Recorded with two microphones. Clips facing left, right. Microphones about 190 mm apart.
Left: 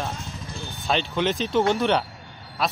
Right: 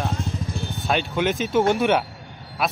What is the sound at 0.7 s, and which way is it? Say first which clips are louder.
Speech: even; centre (ahead or behind).